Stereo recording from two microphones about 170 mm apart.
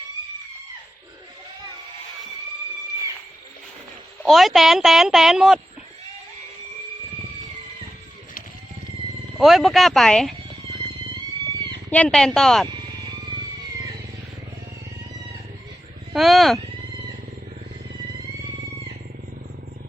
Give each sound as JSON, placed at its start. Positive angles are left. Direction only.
{"t": 4.2, "sound": "speech", "side_deg": 0}
{"t": 9.4, "sound": "speech", "side_deg": 0}
{"t": 11.9, "sound": "speech", "side_deg": 5}
{"t": 12.7, "sound": "vehicle", "side_deg": -20}
{"t": 16.1, "sound": "speech", "side_deg": 0}